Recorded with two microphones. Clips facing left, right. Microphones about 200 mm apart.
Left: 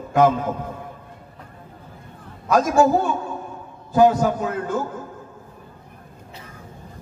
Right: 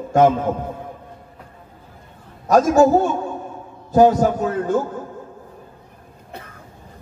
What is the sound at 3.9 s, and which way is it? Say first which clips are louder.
Speech: right 2 dB; 40° right (ahead or behind).